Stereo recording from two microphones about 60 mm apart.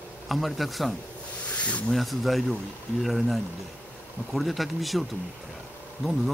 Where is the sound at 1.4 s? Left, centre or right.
Left.